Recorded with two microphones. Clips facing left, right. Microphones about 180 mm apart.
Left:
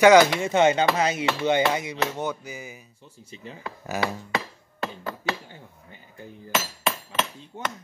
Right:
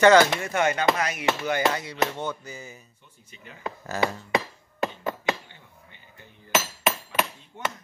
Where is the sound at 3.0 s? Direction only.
30° left (ahead or behind).